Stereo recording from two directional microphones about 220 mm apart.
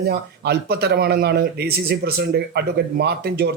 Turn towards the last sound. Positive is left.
turn(degrees=-45)  # may be behind; listen again after turning